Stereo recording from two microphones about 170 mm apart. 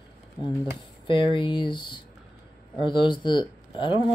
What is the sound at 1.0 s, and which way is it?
Speech, 30° left (ahead or behind).